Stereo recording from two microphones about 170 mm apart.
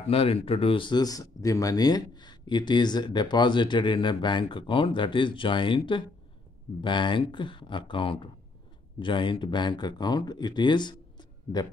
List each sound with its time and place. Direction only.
0.1 s speech: 35° left (ahead or behind)